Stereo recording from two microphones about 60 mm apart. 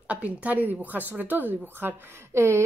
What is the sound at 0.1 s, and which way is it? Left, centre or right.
A woman's voice, right.